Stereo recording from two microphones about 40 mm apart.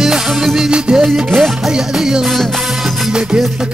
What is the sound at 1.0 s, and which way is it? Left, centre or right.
Music, centre.